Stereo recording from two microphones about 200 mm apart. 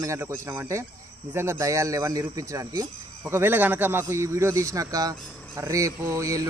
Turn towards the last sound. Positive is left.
turn(degrees=-15)  # may be behind; listen again after turning